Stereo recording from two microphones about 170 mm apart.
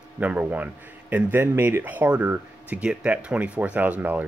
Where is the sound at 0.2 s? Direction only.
10° right (ahead or behind).